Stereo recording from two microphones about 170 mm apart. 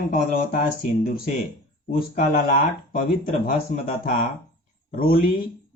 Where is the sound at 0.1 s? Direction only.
55° left (ahead or behind).